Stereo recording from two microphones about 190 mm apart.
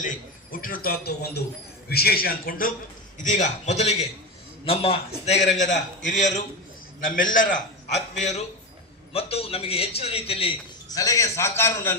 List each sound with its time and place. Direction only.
0.5 s a man's voice: 50° left (ahead or behind); by 10.5 s 30° left (ahead or behind)
10.8 s a man's voice: 20° left (ahead or behind)